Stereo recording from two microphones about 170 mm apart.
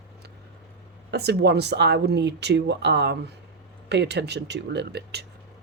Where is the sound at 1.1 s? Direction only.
75° right (ahead or behind).